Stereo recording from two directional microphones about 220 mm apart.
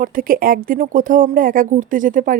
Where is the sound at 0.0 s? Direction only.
40° right (ahead or behind).